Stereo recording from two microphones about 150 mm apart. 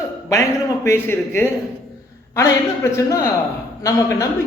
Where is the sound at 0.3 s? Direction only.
20° left (ahead or behind).